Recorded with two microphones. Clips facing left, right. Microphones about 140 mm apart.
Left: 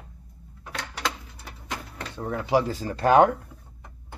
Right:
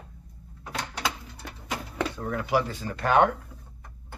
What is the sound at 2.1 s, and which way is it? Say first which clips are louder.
Speech: left 4 dB; 30° left (ahead or behind).